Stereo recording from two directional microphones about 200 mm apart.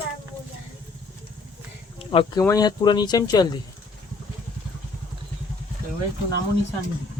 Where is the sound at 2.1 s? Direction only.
25° left (ahead or behind).